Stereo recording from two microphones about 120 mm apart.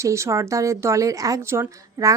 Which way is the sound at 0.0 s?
25° right (ahead or behind).